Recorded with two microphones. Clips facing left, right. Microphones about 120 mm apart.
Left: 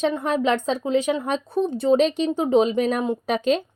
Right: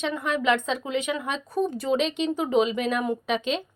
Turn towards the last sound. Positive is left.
turn(degrees=40)  # may be behind; listen again after turning